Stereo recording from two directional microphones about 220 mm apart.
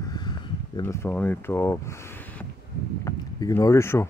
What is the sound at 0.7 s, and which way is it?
Speech, 10° left (ahead or behind).